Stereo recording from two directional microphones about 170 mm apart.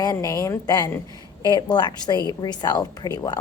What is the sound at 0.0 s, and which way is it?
A woman's voice, 20° left (ahead or behind).